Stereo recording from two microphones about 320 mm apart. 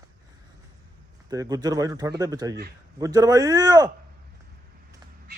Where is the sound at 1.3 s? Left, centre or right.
Centre.